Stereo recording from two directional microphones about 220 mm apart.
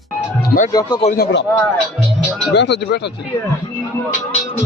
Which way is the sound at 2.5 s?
50° left (ahead or behind).